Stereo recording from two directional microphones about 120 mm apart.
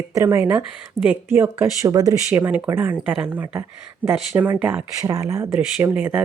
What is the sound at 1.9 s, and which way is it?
Speech, 30° right (ahead or behind).